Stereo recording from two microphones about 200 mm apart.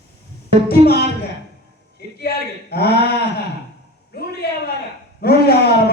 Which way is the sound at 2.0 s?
55° left (ahead or behind).